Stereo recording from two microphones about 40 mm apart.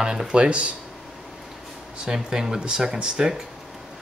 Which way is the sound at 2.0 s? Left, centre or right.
Centre.